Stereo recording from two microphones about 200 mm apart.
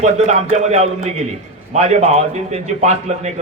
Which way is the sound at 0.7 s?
35° right (ahead or behind).